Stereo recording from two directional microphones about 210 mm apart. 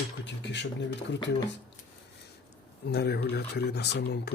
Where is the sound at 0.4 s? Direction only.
55° left (ahead or behind).